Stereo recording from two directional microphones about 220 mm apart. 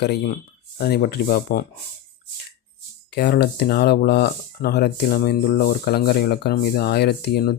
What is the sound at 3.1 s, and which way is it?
Speech, 45° left (ahead or behind).